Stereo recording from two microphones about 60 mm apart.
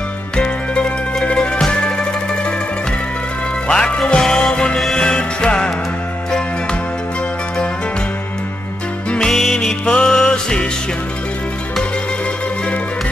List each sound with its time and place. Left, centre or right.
0.4 s music: centre
3.6 s music: centre
9.1 s music: centre